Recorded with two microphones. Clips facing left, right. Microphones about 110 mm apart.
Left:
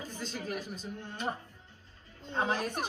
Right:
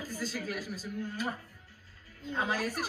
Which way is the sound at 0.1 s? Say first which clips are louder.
Right 3 dB; 5° right (ahead or behind).